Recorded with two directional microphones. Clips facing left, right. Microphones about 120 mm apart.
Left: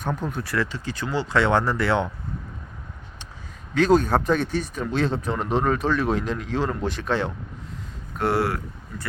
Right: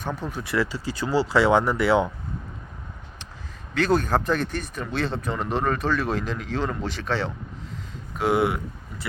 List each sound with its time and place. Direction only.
0.0 s speech: 5° right (ahead or behind)
3.9 s speech: 5° left (ahead or behind)
5.2 s speech: centre (ahead or behind)
5.5 s speech: 10° left (ahead or behind)
8.4 s speech: 20° right (ahead or behind)